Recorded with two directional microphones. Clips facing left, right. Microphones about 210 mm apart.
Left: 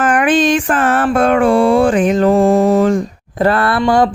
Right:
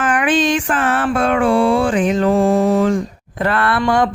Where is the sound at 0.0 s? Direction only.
45° left (ahead or behind).